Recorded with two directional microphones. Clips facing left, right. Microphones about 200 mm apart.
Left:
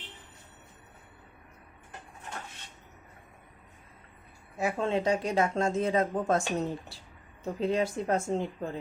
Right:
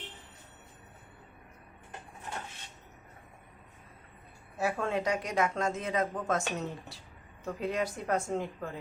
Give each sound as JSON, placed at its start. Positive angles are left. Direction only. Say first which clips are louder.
{"t": 4.5, "sound": "speech", "louder": "left 2 dB", "side_deg": 20}